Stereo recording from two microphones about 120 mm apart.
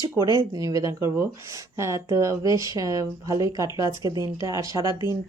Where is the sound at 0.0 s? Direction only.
30° right (ahead or behind).